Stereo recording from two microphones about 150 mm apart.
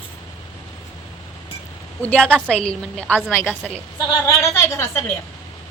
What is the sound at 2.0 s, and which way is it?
Speech, 10° left (ahead or behind).